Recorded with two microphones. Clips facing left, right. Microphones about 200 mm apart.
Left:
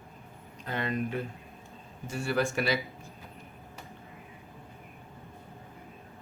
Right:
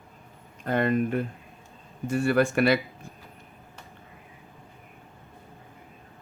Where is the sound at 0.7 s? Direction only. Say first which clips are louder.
Right 8 dB; 50° right (ahead or behind).